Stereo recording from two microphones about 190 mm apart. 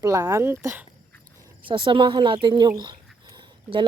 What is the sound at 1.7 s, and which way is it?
Speech, 25° right (ahead or behind).